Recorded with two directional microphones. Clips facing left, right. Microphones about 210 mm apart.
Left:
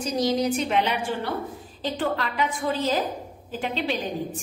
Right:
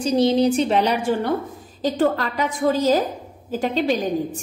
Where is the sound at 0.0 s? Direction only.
30° right (ahead or behind).